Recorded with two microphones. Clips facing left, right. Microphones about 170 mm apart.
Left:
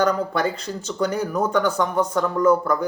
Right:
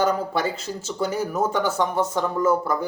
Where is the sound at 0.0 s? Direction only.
5° right (ahead or behind).